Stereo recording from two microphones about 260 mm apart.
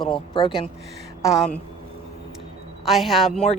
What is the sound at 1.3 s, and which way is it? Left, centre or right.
Speech, centre.